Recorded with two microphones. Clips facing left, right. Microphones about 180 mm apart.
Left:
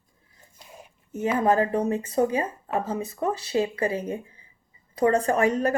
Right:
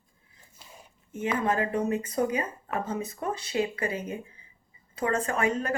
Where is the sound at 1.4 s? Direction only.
35° left (ahead or behind).